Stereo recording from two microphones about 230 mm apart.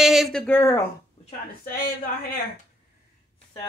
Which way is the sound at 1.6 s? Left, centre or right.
Left.